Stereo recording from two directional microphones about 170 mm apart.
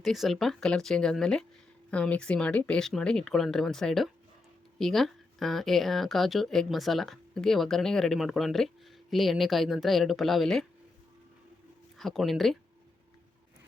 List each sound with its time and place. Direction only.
0.0 s speech: centre (ahead or behind)
11.9 s speech: centre (ahead or behind)